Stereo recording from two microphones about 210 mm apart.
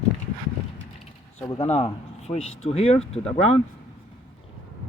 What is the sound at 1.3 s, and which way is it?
Speech, 30° left (ahead or behind).